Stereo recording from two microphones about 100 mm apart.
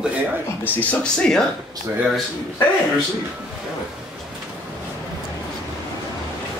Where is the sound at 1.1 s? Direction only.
5° left (ahead or behind).